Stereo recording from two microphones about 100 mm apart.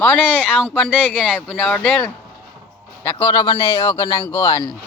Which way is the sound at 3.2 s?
45° left (ahead or behind).